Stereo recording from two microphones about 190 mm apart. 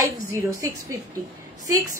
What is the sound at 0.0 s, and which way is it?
Speech, 15° right (ahead or behind).